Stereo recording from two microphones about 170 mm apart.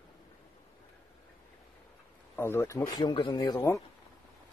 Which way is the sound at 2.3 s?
15° left (ahead or behind).